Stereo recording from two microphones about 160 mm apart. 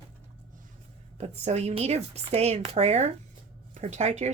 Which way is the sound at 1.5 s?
45° right (ahead or behind).